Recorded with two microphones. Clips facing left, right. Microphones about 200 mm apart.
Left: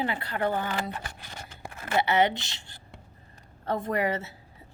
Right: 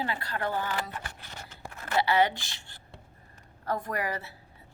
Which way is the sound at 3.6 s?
25° left (ahead or behind).